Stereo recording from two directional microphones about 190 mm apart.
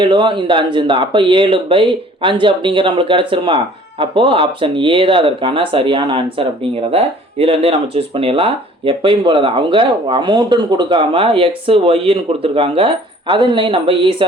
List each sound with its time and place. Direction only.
0.0 s speech: 25° right (ahead or behind)